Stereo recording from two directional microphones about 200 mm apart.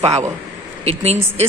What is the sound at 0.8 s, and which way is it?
Speech, 30° right (ahead or behind).